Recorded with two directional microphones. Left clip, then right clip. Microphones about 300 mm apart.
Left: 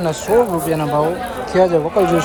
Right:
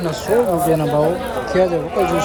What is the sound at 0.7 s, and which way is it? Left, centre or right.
A man's voice, centre.